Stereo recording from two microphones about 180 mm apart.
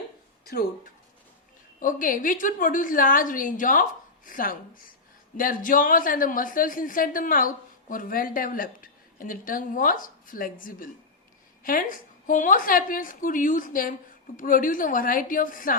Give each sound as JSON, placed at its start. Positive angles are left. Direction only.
{"t": 1.8, "sound": "a woman's voice", "side_deg": 50}